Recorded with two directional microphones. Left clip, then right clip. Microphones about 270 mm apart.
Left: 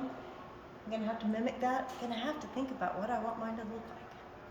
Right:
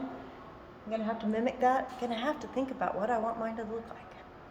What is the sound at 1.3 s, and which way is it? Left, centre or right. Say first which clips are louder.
A woman's voice: right 7 dB; centre.